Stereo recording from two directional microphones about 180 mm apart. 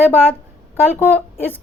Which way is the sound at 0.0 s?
10° left (ahead or behind).